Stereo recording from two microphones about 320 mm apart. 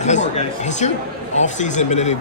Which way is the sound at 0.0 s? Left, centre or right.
Left.